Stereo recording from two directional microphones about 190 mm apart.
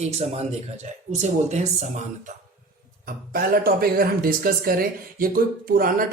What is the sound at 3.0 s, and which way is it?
Speech, 50° right (ahead or behind).